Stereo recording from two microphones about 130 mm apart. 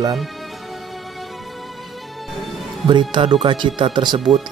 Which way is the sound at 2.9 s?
40° right (ahead or behind).